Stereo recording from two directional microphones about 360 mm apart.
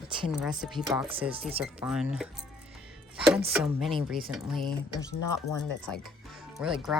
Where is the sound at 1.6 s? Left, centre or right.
Centre.